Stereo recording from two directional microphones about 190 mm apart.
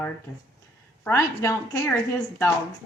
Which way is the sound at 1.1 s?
15° left (ahead or behind).